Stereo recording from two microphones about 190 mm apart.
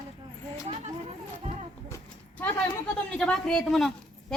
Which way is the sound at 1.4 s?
35° right (ahead or behind).